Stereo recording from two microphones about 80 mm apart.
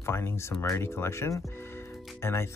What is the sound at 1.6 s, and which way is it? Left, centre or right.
Music, left.